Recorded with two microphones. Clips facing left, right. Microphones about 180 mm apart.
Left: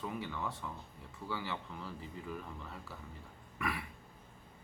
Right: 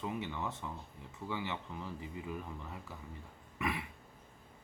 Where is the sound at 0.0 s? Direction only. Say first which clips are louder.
Right 1 dB; 20° right (ahead or behind).